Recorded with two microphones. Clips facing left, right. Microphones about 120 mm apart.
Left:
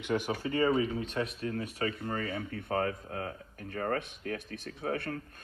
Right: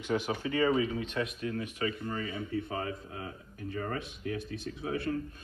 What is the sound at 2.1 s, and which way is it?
Speech, 55° left (ahead or behind).